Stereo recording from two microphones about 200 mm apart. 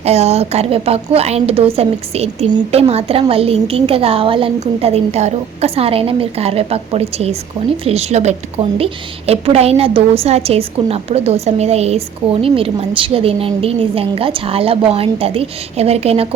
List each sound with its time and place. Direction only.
0.0 s a woman's voice: 30° right (ahead or behind)